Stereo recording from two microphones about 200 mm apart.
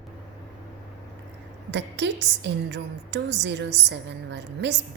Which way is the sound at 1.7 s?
60° right (ahead or behind).